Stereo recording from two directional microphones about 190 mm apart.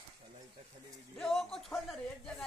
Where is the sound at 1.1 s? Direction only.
5° left (ahead or behind).